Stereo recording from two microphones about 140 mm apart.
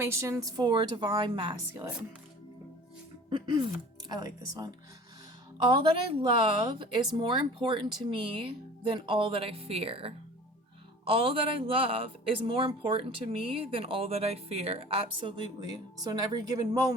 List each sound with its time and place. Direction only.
0.0 s speech: 20° right (ahead or behind); by 1.6 s 35° right (ahead or behind)
1.7 s speech: 20° right (ahead or behind)
3.2 s speech: 30° right (ahead or behind)
5.6 s speech: 40° right (ahead or behind)
14.9 s speech: 35° right (ahead or behind)